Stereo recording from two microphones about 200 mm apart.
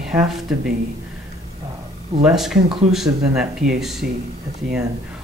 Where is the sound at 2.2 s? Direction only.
Centre (ahead or behind).